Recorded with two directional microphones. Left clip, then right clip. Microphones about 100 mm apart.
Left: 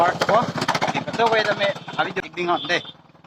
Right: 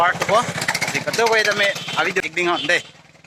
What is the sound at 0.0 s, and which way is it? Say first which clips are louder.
Speech: right 1 dB; 15° right (ahead or behind).